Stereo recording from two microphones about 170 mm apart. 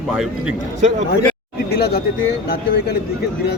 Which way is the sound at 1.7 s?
65° left (ahead or behind).